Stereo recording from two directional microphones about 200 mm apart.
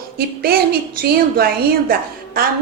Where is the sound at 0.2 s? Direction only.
50° right (ahead or behind).